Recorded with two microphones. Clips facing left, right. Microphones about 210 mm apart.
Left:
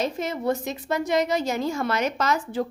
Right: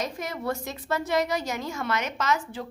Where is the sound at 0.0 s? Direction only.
25° left (ahead or behind).